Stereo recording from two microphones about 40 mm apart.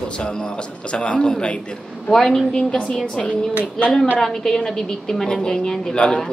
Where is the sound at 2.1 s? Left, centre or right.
Centre.